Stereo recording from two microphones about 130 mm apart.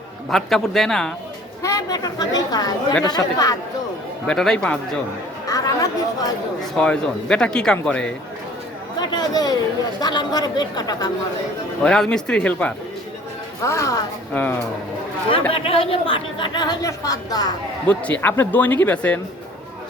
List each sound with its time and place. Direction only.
0.3 s a man's voice: centre (ahead or behind)
1.6 s a woman's voice: 25° left (ahead or behind)
4.3 s speech: 5° left (ahead or behind)
5.5 s chatter: 25° left (ahead or behind)
6.7 s speech: 5° left (ahead or behind)
9.0 s a woman's voice: 30° left (ahead or behind)
11.8 s speech: 5° left (ahead or behind)
13.6 s a woman's voice: 25° left (ahead or behind)
15.5 s a woman's voice: 45° left (ahead or behind); by 17.5 s 30° left (ahead or behind)
17.8 s speech: 15° left (ahead or behind)